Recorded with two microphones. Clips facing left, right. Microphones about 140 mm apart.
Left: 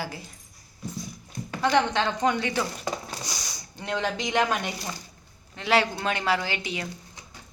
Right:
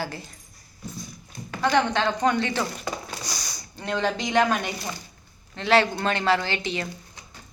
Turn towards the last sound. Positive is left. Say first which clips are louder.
# right 3 dB
turn(degrees=10)  # may be behind; listen again after turning